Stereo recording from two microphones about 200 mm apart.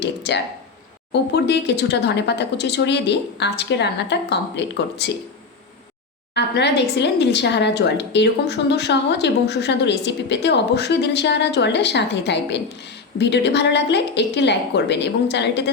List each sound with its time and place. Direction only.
0.0 s a woman's voice: 60° left (ahead or behind)
6.3 s a woman's voice: 55° left (ahead or behind)